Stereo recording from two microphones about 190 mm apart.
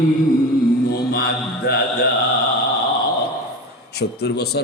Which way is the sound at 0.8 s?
55° left (ahead or behind).